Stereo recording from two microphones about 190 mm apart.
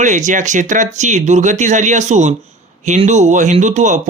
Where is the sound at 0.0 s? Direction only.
40° right (ahead or behind).